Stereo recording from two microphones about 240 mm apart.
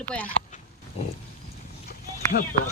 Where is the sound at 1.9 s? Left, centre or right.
Left.